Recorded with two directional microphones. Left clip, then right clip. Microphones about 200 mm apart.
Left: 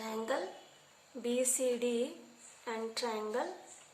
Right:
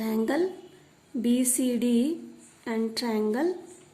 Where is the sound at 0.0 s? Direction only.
40° right (ahead or behind).